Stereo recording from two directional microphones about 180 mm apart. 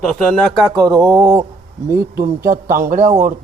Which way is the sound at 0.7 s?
20° right (ahead or behind).